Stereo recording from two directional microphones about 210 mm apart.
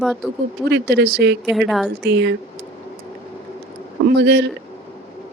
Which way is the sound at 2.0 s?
55° right (ahead or behind).